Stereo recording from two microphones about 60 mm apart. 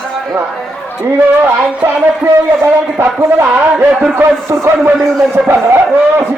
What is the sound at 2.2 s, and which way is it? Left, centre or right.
A man's voice, right.